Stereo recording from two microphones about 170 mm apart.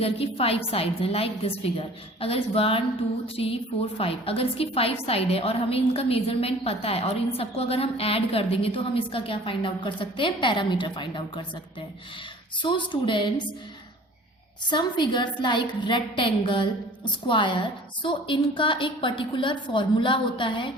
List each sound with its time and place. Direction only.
0.0 s a woman's voice: 35° left (ahead or behind)
12.6 s a woman's voice: 30° left (ahead or behind)
14.7 s a woman's voice: 25° left (ahead or behind)